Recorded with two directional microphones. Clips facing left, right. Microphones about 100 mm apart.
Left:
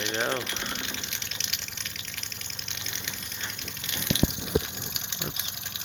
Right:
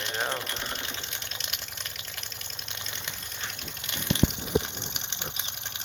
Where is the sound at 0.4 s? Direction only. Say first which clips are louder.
Even; 40° right (ahead or behind).